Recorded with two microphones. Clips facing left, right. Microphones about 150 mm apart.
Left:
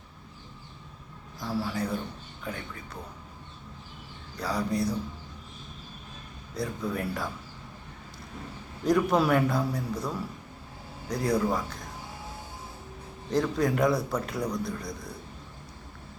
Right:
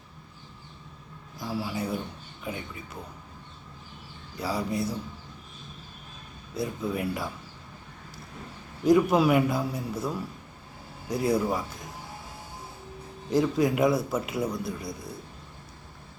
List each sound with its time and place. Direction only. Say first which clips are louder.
1.4 s a man's voice: left 1 dB; 5° right (ahead or behind)
4.4 s a man's voice: even; 5° right (ahead or behind)
6.6 s speech: right 2 dB; 5° right (ahead or behind)
8.8 s a man's voice: right 3 dB; 5° right (ahead or behind)
13.3 s a man's voice: right 2 dB; 5° right (ahead or behind)